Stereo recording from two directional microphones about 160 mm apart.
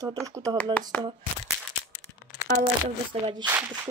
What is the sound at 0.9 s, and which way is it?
Speech, 10° left (ahead or behind).